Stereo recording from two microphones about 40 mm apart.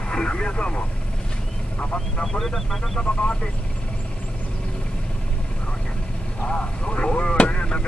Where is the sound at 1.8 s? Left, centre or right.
Left.